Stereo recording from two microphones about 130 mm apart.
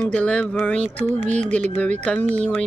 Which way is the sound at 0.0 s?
10° left (ahead or behind).